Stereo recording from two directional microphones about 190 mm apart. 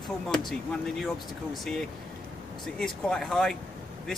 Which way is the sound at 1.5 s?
Centre (ahead or behind).